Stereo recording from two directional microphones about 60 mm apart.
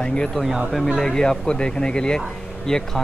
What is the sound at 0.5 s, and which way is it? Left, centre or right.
Speech, centre.